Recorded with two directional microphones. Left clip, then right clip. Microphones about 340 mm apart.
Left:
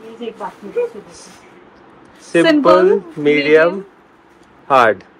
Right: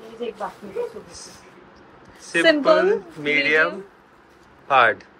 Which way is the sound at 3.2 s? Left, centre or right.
Centre.